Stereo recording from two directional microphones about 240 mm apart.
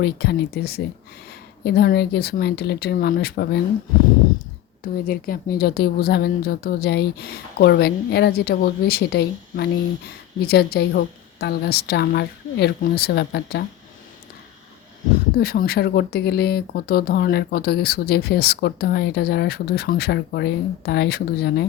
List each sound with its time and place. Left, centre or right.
0.0 s speech: left
4.8 s speech: left
15.4 s speech: left